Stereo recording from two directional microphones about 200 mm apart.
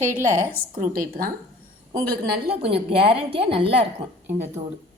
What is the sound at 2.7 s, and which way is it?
A woman's voice, 30° right (ahead or behind).